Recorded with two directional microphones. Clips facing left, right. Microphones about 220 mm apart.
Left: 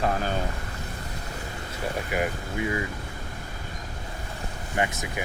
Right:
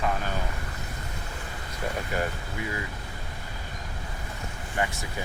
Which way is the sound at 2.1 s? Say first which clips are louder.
Left 3 dB; 15° left (ahead or behind).